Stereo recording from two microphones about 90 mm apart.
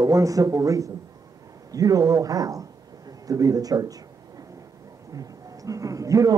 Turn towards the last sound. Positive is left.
turn(degrees=-40)  # may be behind; listen again after turning